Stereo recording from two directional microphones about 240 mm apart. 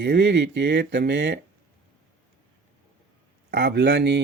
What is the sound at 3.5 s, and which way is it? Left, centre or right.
Speech, right.